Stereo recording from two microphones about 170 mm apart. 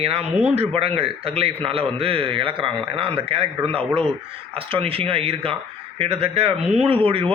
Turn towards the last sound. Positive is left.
turn(degrees=-30)  # may be behind; listen again after turning